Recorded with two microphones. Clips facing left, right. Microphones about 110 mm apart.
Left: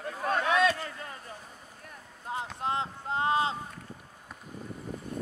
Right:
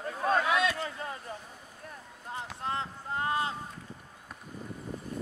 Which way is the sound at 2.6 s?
20° left (ahead or behind).